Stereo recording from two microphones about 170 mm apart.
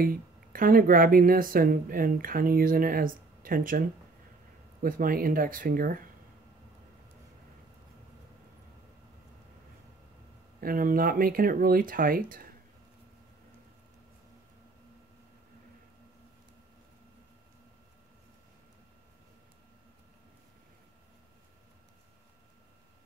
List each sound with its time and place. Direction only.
0.0 s speech: 55° right (ahead or behind)
4.8 s speech: 55° right (ahead or behind)
10.6 s speech: 55° right (ahead or behind)